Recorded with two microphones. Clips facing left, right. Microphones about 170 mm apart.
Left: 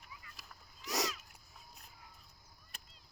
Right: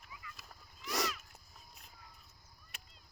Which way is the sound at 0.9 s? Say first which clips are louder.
Even; 15° left (ahead or behind).